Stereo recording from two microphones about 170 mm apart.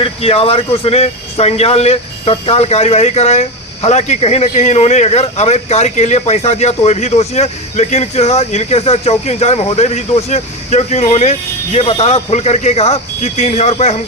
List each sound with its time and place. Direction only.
0.0 s speech: 35° left (ahead or behind)